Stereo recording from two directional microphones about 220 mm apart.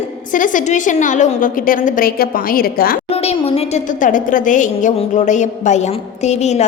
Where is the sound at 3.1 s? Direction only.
25° left (ahead or behind).